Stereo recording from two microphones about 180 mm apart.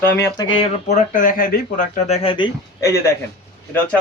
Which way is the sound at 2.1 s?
35° left (ahead or behind).